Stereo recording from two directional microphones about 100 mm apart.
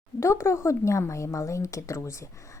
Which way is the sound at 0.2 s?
25° left (ahead or behind).